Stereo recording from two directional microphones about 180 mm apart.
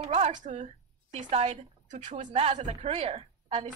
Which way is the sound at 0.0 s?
35° right (ahead or behind).